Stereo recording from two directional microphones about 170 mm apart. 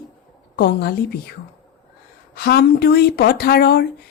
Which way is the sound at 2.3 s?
70° left (ahead or behind).